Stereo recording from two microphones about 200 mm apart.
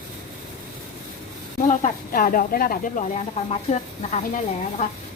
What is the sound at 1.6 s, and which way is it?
Speech, 40° left (ahead or behind).